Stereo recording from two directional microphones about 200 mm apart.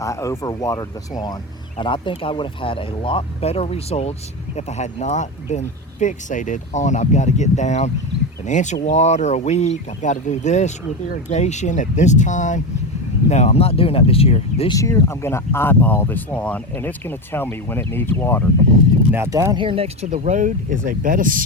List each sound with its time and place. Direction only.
0.0 s speech: 15° left (ahead or behind)
14.8 s speech: 15° left (ahead or behind)
19.1 s speech: 10° right (ahead or behind); by 21.4 s 45° right (ahead or behind)